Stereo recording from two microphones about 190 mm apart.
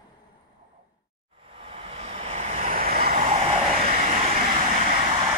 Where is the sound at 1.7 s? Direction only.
30° right (ahead or behind); by 3.1 s 50° right (ahead or behind).